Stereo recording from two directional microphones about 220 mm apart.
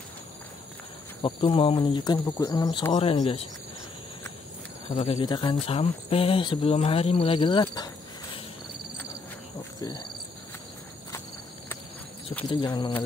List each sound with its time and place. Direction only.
1.2 s speech: 25° left (ahead or behind)
4.9 s speech: 25° left (ahead or behind)
9.8 s cricket: 20° left (ahead or behind)
12.4 s speech: 20° left (ahead or behind)